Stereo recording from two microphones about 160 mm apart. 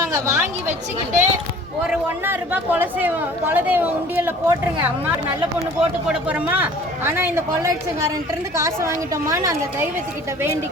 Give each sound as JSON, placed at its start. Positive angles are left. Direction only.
{"t": 0.1, "sound": "speech", "side_deg": -15}
{"t": 0.7, "sound": "a woman's voice", "side_deg": -50}
{"t": 1.9, "sound": "speech", "side_deg": -10}
{"t": 6.1, "sound": "a woman's voice", "side_deg": -10}